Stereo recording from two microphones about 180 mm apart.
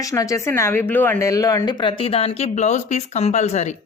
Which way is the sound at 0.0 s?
20° left (ahead or behind).